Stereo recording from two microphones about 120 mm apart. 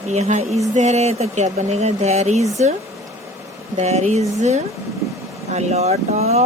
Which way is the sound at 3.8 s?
65° right (ahead or behind).